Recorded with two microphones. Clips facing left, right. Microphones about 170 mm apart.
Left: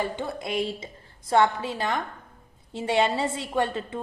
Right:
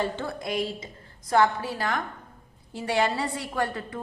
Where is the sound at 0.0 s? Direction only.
20° left (ahead or behind).